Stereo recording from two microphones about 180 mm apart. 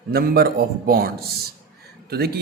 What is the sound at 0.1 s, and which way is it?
A man's voice, 60° right (ahead or behind).